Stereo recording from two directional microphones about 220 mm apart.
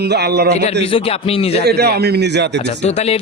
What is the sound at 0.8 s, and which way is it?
Speech, 25° left (ahead or behind).